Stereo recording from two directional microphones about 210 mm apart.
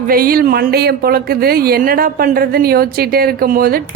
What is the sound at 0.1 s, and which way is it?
Speech, 45° right (ahead or behind).